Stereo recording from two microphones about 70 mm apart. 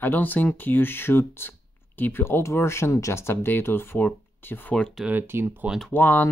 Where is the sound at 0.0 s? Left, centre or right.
Left.